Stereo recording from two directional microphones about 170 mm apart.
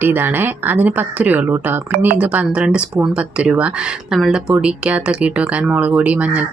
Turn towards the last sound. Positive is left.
turn(degrees=-10)  # may be behind; listen again after turning